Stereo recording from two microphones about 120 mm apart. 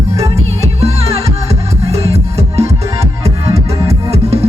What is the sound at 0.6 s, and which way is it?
Music, 60° right (ahead or behind).